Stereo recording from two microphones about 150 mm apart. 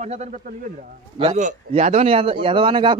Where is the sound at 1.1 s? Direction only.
40° right (ahead or behind).